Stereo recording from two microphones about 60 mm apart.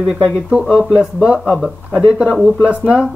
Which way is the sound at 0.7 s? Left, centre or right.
Centre.